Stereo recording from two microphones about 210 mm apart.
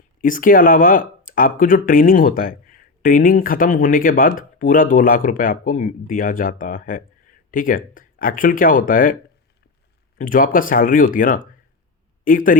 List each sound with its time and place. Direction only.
0.2 s speech: 40° left (ahead or behind)
10.2 s speech: 40° left (ahead or behind)